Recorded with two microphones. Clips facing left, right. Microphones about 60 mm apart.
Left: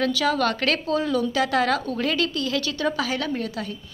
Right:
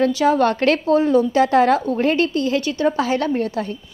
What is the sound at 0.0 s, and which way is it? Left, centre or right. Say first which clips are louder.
A woman's voice: right 6 dB; right.